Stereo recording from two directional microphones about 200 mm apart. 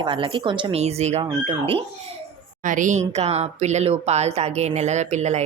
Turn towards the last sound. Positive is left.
turn(degrees=-35)  # may be behind; listen again after turning